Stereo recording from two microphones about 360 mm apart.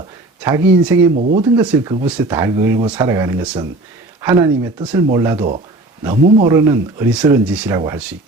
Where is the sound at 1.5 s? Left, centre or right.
Centre.